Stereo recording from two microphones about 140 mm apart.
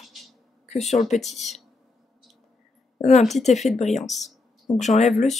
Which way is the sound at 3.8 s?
55° left (ahead or behind).